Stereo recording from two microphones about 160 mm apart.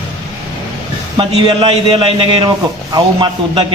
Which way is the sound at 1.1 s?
30° right (ahead or behind).